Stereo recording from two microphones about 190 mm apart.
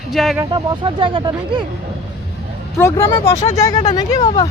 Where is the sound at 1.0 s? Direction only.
25° right (ahead or behind).